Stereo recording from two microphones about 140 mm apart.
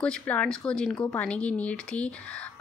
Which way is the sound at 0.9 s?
20° left (ahead or behind).